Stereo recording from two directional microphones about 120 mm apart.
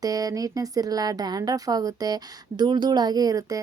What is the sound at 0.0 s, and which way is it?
Speech, 30° right (ahead or behind).